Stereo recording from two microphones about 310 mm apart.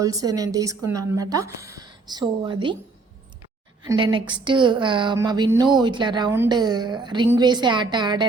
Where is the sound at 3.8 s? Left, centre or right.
Centre.